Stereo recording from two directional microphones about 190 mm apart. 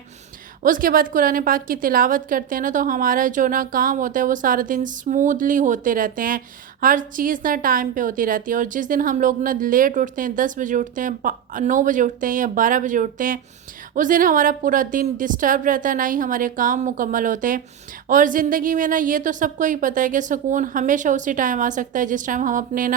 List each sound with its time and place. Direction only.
0.6 s a woman's voice: 45° right (ahead or behind)